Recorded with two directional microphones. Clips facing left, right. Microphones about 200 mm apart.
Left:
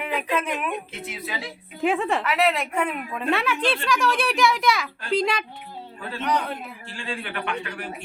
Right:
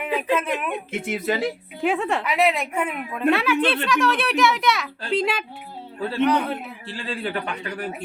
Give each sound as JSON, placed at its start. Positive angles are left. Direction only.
{"t": 0.0, "sound": "speech", "side_deg": -5}
{"t": 0.9, "sound": "speech", "side_deg": -50}
{"t": 1.8, "sound": "a woman's voice", "side_deg": 0}
{"t": 2.2, "sound": "a woman's voice", "side_deg": -10}
{"t": 6.9, "sound": "a man's voice", "side_deg": -35}